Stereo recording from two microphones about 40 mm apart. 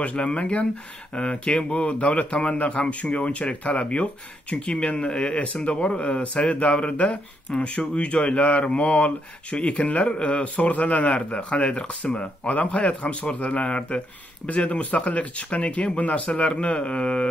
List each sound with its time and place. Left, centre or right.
0.0 s speech: left
7.5 s speech: left
9.9 s speech: left
10.4 s speech: left